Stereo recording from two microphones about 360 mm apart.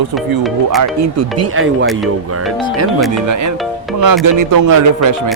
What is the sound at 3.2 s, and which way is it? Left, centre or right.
Speech, right.